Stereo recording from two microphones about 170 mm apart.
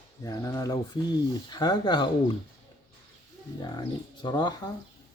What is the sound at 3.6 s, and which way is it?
Speech, 25° left (ahead or behind).